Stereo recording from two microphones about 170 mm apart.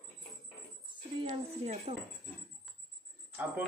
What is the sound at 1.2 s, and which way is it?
Speech, 35° right (ahead or behind).